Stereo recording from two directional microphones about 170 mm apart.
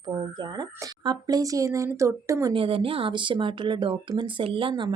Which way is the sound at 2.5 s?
30° right (ahead or behind).